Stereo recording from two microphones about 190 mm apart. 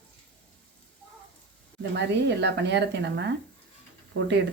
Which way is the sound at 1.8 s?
60° right (ahead or behind).